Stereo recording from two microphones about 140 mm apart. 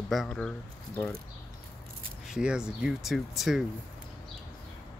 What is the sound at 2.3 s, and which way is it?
Speech, 5° right (ahead or behind).